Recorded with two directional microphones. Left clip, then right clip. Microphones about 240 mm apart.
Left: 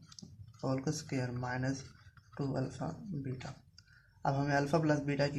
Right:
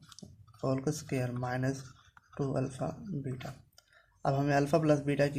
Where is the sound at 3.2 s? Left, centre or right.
Right.